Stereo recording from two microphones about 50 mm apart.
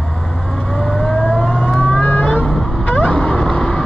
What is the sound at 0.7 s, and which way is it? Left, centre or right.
Vehicle, centre.